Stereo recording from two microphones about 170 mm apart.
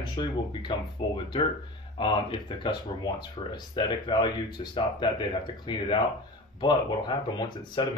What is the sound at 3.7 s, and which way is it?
Speech, 25° left (ahead or behind).